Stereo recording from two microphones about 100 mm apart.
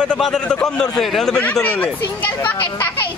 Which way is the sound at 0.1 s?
10° left (ahead or behind).